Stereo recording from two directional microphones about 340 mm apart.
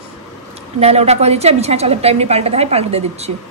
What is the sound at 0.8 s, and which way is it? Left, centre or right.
A woman's voice, centre.